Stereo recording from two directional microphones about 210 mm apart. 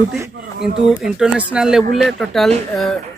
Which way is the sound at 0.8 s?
Centre (ahead or behind).